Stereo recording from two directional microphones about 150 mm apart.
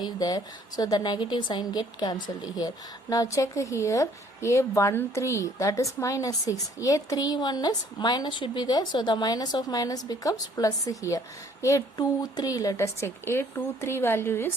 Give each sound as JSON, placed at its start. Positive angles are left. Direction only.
{"t": 0.0, "sound": "a woman's voice", "side_deg": 25}